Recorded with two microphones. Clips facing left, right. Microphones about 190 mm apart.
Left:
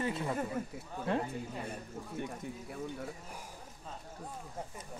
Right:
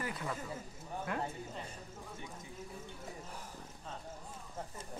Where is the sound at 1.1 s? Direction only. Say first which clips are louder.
Left 7 dB; 30° left (ahead or behind).